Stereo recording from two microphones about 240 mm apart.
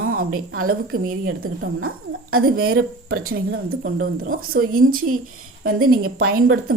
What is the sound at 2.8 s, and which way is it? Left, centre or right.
Speech, right.